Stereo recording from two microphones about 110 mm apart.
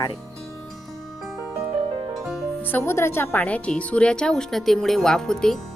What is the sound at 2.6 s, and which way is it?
Speech, 20° left (ahead or behind).